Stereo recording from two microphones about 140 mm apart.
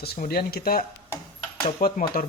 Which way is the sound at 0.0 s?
90° left.